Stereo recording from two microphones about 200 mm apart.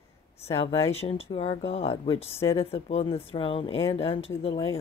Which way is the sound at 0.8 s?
30° left (ahead or behind).